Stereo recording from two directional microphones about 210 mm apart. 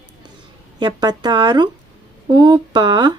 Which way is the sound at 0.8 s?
20° right (ahead or behind).